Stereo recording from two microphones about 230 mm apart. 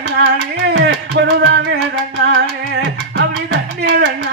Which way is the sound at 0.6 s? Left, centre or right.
Right.